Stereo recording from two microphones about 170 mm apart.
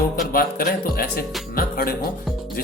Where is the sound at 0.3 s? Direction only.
60° left (ahead or behind).